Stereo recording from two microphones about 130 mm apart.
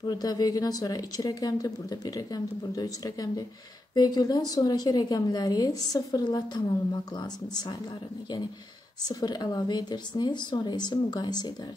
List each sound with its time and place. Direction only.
0.0 s a woman's voice: 30° left (ahead or behind)
9.0 s a woman's voice: 30° left (ahead or behind)